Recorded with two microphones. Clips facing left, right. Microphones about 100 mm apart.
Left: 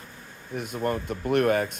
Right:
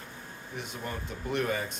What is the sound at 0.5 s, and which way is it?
Speech, 50° left (ahead or behind).